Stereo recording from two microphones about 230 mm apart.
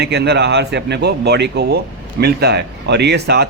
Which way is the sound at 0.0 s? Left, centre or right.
Right.